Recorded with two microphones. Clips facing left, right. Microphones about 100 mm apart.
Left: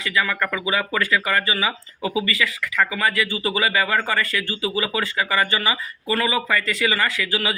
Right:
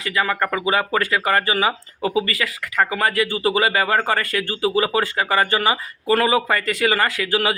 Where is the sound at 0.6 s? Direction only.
40° right (ahead or behind).